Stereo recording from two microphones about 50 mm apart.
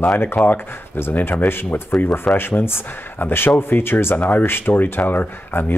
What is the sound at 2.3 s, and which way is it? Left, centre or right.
Speech, left.